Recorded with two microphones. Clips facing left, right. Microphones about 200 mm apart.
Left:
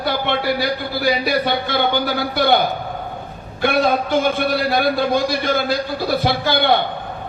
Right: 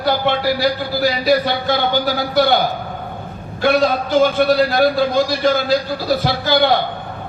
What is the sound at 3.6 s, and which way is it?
A man's voice, 55° left (ahead or behind).